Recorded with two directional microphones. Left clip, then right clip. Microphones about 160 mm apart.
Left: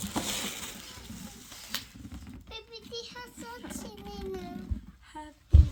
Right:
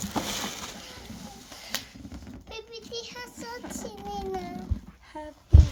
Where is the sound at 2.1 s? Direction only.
40° left (ahead or behind).